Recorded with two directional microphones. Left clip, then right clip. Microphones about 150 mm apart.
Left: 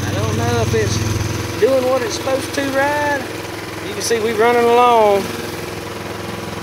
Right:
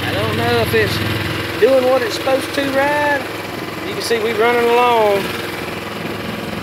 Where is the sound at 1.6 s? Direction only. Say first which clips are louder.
Right 2 dB; centre (ahead or behind).